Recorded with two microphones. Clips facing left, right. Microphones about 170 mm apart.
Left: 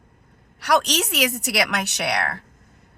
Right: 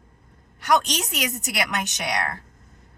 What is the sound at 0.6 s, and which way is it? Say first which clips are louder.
A woman's voice: left 2 dB; 75° left (ahead or behind).